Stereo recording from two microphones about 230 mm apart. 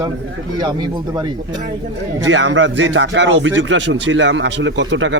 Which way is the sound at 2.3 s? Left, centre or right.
Right.